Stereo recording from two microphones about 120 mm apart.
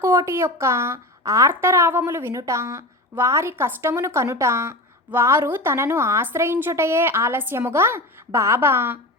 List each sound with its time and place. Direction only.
0.0 s a woman's voice: 20° right (ahead or behind)